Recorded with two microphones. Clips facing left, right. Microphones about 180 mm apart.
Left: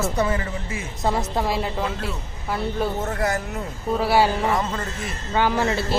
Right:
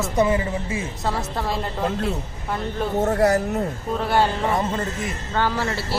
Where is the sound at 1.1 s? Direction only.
15° left (ahead or behind).